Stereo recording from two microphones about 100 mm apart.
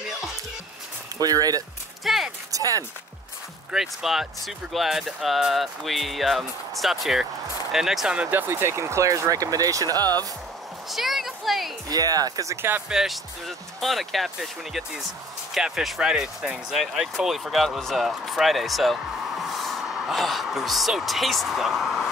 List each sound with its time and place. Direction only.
1.2 s speech: 40° right (ahead or behind)
2.0 s speech: centre (ahead or behind)
2.5 s speech: 35° right (ahead or behind)
3.7 s speech: 5° right (ahead or behind)
8.3 s speech: 20° right (ahead or behind); by 10.2 s 40° right (ahead or behind)
10.9 s speech: centre (ahead or behind)
11.9 s speech: 40° right (ahead or behind)
12.9 s speech: centre (ahead or behind)